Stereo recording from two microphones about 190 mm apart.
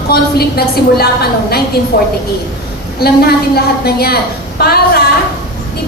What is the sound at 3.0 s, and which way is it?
A woman's voice, 55° left (ahead or behind).